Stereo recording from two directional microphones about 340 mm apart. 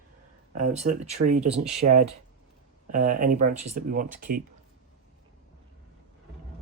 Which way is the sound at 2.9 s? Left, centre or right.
Right.